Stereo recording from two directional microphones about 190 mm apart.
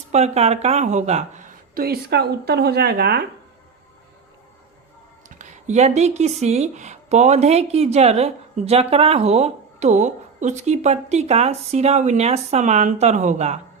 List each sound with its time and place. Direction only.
0.1 s speech: 35° right (ahead or behind)
1.7 s speech: 55° right (ahead or behind)
5.4 s speech: 40° right (ahead or behind)